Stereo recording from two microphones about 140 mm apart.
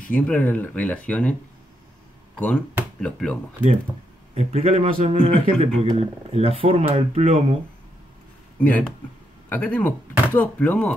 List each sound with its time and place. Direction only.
0.1 s speech: 10° left (ahead or behind)
2.3 s speech: 5° left (ahead or behind)
4.4 s speech: 45° right (ahead or behind)
8.5 s speech: 10° left (ahead or behind)